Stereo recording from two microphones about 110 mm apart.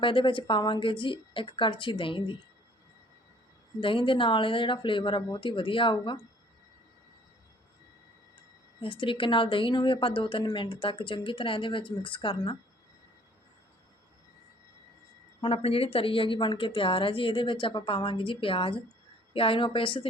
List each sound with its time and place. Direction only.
0.0 s speech: 50° left (ahead or behind)
3.8 s speech: 50° left (ahead or behind)
8.8 s speech: 50° left (ahead or behind)
15.4 s speech: 60° left (ahead or behind)